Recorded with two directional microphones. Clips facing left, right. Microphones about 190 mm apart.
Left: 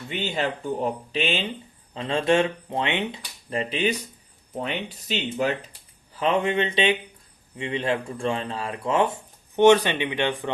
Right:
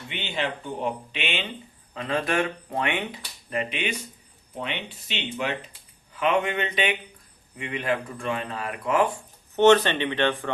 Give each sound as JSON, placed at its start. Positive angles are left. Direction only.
{"t": 0.1, "sound": "speech", "side_deg": 40}
{"t": 9.6, "sound": "speech", "side_deg": 10}